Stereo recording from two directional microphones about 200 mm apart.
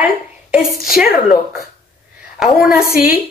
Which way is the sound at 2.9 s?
45° left (ahead or behind).